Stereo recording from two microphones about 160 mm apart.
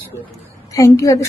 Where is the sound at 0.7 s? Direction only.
20° left (ahead or behind).